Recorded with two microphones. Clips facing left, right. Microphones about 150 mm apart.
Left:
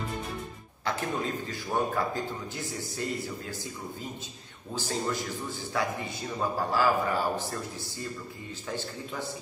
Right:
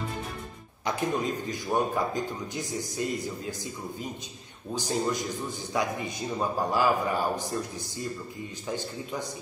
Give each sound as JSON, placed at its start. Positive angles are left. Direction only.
{"t": 0.8, "sound": "a man's voice", "side_deg": -15}
{"t": 4.7, "sound": "a man's voice", "side_deg": -15}
{"t": 8.6, "sound": "a man's voice", "side_deg": -15}